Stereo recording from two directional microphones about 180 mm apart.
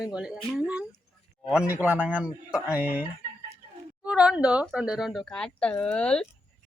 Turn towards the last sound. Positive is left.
turn(degrees=5)  # may be behind; listen again after turning